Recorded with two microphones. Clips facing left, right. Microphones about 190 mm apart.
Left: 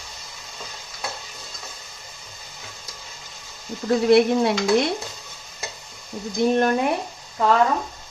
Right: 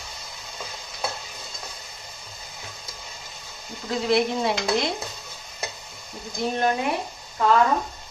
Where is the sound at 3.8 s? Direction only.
60° left (ahead or behind).